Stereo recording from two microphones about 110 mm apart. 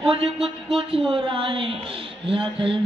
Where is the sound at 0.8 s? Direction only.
55° right (ahead or behind).